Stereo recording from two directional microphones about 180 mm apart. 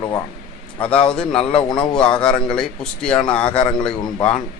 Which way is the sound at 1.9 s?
5° left (ahead or behind).